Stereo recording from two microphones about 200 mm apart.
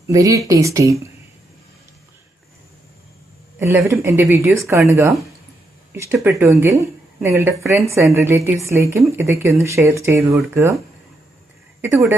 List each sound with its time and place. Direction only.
0.1 s speech: 15° right (ahead or behind)
3.6 s speech: 15° right (ahead or behind)
11.8 s speech: 10° right (ahead or behind)